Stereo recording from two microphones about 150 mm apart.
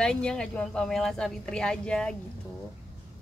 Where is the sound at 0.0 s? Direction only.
5° left (ahead or behind).